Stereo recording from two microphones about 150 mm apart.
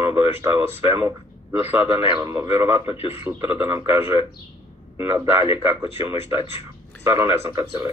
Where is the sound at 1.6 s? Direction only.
40° left (ahead or behind).